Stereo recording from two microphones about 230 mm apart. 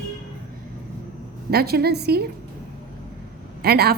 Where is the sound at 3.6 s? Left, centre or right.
Right.